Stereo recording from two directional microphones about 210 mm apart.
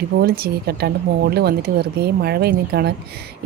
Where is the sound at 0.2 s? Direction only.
45° right (ahead or behind).